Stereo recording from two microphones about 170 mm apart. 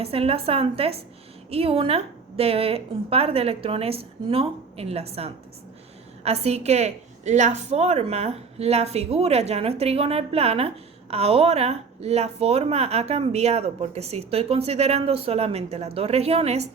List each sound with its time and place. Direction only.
0.0 s a woman's voice: 35° right (ahead or behind)